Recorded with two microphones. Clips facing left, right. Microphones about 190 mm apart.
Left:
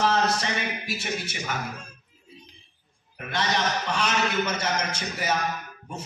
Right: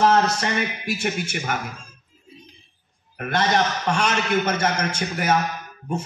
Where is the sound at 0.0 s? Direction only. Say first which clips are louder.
Right 5 dB; 50° right (ahead or behind).